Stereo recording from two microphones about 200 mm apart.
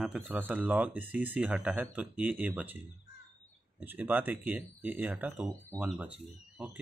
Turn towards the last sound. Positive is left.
turn(degrees=-5)  # may be behind; listen again after turning